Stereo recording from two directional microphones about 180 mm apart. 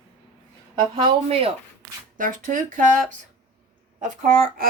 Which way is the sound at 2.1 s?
50° right (ahead or behind).